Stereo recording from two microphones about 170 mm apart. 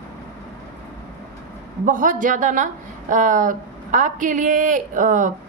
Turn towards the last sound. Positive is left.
turn(degrees=-50)  # may be behind; listen again after turning